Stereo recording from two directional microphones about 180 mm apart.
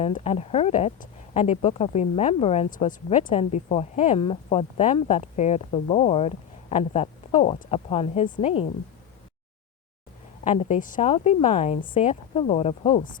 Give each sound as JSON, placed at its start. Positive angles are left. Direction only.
{"t": 0.0, "sound": "speech", "side_deg": 35}
{"t": 10.4, "sound": "speech", "side_deg": 40}